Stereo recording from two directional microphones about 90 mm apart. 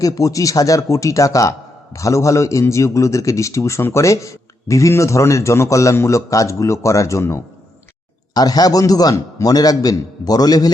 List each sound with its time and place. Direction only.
0.0 s a man's voice: 40° left (ahead or behind)
8.3 s a man's voice: 45° left (ahead or behind)